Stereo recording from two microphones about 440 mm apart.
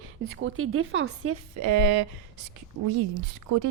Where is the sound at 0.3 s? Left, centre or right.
Right.